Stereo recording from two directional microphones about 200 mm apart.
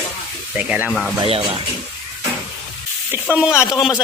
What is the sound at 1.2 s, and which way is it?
Speech, 25° right (ahead or behind).